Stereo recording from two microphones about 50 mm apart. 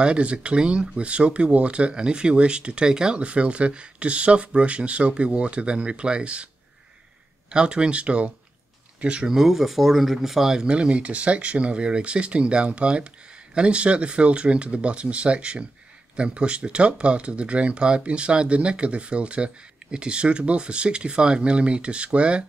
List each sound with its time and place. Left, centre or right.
0.0 s speech: right
7.5 s speech: centre